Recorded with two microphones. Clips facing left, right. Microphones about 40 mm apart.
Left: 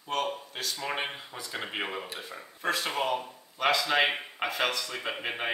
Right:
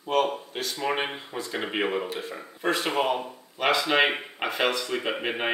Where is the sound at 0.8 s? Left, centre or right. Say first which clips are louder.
Right 7 dB; centre.